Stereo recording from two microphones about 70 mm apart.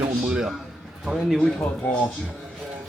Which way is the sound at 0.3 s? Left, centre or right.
Centre.